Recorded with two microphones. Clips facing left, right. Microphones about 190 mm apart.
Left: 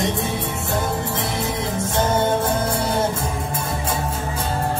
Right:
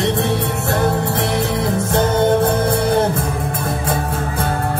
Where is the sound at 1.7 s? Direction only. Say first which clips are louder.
Right 3 dB; 60° right (ahead or behind).